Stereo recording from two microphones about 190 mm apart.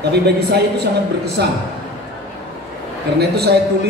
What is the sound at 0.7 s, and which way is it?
Speech, 60° right (ahead or behind).